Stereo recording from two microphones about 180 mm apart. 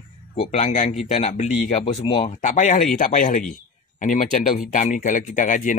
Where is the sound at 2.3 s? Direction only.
45° left (ahead or behind).